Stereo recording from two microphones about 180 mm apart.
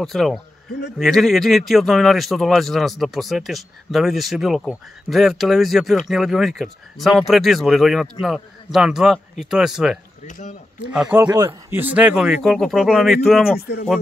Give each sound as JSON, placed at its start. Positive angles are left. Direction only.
{"t": 0.0, "sound": "speech", "side_deg": 0}
{"t": 10.2, "sound": "speech", "side_deg": 40}
{"t": 10.9, "sound": "speech", "side_deg": -5}
{"t": 11.2, "sound": "speech", "side_deg": -20}
{"t": 13.6, "sound": "speech", "side_deg": 60}